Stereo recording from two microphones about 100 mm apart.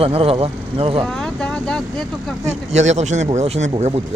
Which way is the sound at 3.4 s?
90° right.